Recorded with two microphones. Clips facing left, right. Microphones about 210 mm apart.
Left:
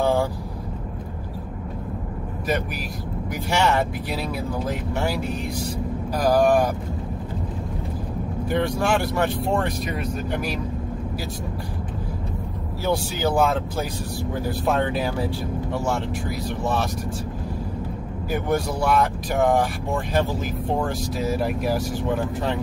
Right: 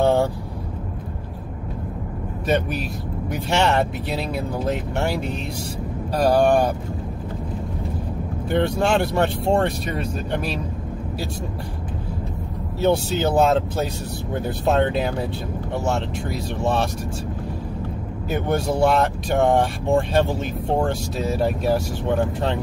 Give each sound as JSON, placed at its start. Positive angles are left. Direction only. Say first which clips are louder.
{"t": 0.0, "sound": "vehicle", "louder": "right 3 dB", "side_deg": -25}
{"t": 2.4, "sound": "speech", "louder": "right 4 dB", "side_deg": -25}
{"t": 8.5, "sound": "speech", "louder": "right 2 dB", "side_deg": -25}
{"t": 12.8, "sound": "speech", "louder": "right 4 dB", "side_deg": -25}
{"t": 18.3, "sound": "speech", "louder": "right 2 dB", "side_deg": -25}